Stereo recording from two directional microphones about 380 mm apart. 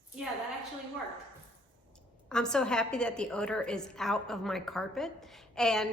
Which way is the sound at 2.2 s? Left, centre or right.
Centre.